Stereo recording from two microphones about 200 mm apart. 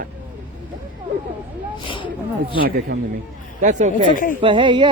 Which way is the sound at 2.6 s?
45° right (ahead or behind).